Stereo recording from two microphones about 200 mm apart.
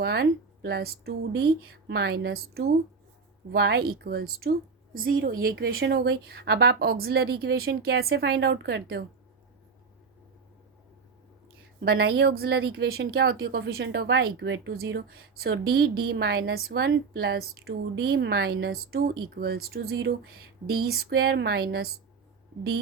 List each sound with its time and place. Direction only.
0.0 s a woman's voice: 55° right (ahead or behind)
11.9 s a woman's voice: 55° right (ahead or behind)